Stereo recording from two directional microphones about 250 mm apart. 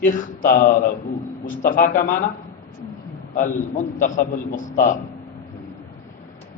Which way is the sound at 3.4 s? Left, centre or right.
Left.